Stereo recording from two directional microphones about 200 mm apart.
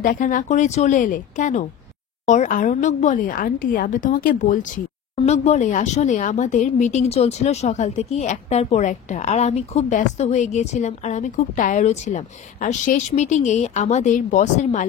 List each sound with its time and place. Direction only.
0.0 s a woman's voice: 40° left (ahead or behind)